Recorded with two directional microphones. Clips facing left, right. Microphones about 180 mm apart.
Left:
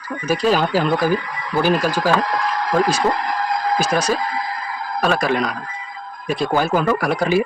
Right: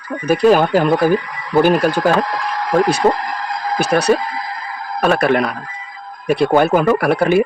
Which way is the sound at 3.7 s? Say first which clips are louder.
Right 7 dB; 65° right (ahead or behind).